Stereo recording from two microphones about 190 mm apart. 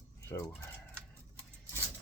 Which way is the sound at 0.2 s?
15° left (ahead or behind).